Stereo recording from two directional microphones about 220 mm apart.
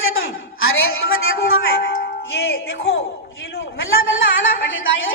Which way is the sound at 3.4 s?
60° left (ahead or behind).